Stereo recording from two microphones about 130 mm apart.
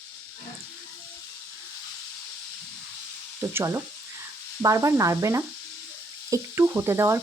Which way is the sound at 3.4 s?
20° right (ahead or behind).